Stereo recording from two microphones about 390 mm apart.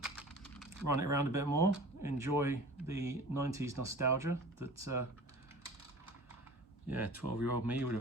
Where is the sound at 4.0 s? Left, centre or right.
Right.